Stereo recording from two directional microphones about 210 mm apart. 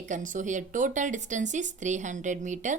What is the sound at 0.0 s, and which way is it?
Speech, 35° right (ahead or behind).